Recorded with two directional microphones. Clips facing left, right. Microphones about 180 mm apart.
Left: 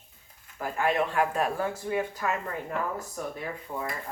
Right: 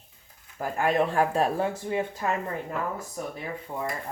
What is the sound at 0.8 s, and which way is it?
A woman's voice, 35° right (ahead or behind).